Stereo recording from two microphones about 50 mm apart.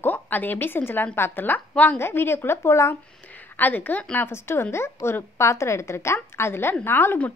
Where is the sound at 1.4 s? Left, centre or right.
Left.